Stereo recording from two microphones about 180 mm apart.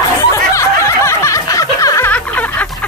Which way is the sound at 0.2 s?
15° left (ahead or behind).